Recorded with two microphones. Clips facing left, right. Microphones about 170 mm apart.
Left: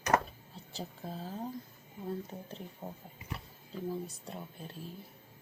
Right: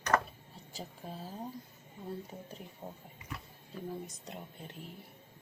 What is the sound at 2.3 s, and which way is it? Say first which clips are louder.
Speech: left 2 dB; 10° right (ahead or behind).